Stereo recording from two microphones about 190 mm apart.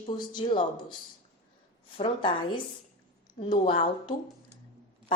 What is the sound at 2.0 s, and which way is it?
Speech, 25° left (ahead or behind).